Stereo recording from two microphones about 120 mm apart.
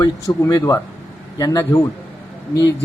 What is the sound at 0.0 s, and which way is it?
Speech, 30° left (ahead or behind).